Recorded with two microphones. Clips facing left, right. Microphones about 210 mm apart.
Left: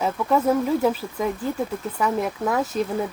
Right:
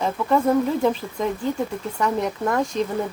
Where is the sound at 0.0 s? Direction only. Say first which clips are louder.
Right 1 dB; 5° left (ahead or behind).